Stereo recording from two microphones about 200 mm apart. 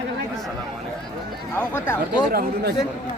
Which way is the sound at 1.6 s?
10° left (ahead or behind).